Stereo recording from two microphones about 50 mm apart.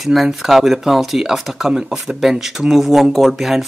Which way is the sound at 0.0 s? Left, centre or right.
Centre.